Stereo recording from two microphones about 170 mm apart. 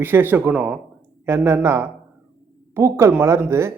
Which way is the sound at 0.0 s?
10° right (ahead or behind).